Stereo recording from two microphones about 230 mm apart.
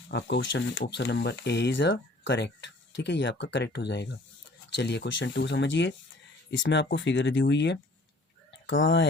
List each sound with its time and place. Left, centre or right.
0.1 s speech: left